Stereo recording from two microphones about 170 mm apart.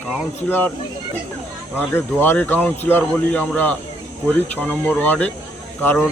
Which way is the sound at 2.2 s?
10° left (ahead or behind).